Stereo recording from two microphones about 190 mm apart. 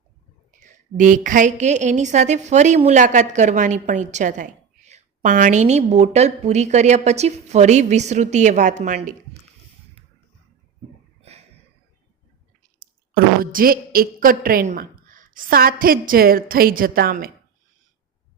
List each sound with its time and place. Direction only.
0.6 s a woman's voice: 40° right (ahead or behind)
11.2 s a sound: 35° right (ahead or behind)
12.8 s speech: 50° right (ahead or behind)